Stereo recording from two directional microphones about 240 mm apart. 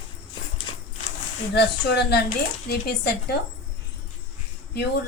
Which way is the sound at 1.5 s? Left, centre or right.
Left.